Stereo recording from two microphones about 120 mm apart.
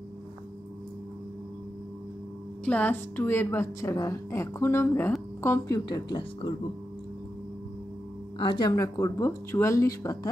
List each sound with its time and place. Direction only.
2.6 s a woman's voice: 15° left (ahead or behind); by 6.5 s 35° left (ahead or behind)
8.4 s a woman's voice: 40° left (ahead or behind)